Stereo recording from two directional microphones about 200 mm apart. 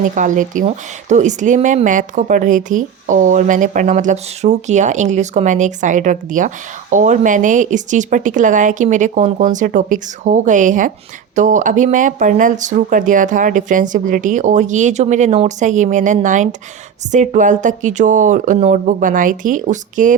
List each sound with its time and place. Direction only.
0.1 s speech: 40° right (ahead or behind)